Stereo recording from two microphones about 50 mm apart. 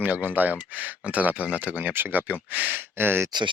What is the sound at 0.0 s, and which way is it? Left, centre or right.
Speech, right.